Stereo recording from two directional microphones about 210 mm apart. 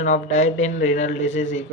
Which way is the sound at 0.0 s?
35° left (ahead or behind).